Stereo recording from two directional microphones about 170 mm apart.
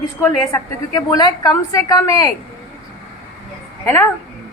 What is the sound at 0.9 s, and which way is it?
A woman's voice, 20° left (ahead or behind).